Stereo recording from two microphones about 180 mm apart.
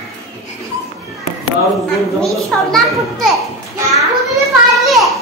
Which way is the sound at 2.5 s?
5° left (ahead or behind).